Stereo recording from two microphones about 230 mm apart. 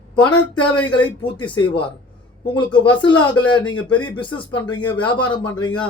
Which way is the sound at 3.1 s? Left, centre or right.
Centre.